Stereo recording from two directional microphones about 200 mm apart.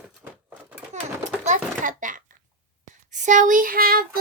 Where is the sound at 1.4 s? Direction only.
40° right (ahead or behind).